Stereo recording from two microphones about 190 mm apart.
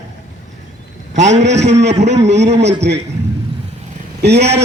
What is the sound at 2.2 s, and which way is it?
Speech, 35° right (ahead or behind).